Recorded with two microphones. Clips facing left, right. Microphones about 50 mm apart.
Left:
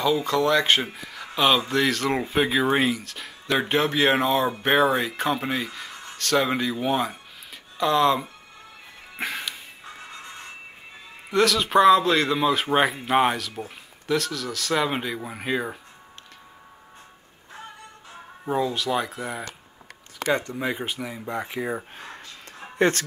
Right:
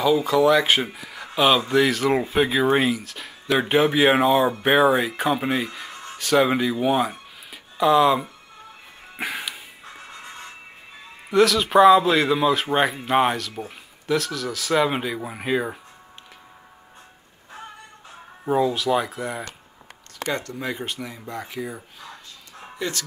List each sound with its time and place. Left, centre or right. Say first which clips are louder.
0.0 s speech: right 4 dB; centre
9.2 s music: right 1 dB; centre
11.2 s speech: right 3 dB; centre
18.4 s speech: right 4 dB; centre
20.3 s speech: left 2 dB; centre; by 23.0 s left